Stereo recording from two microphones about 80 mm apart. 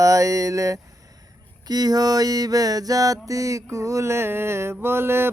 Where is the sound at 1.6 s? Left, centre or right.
Right.